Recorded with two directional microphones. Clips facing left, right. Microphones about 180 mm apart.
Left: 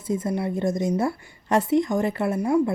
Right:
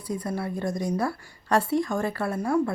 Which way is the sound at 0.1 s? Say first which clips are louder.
Left 5 dB; 20° left (ahead or behind).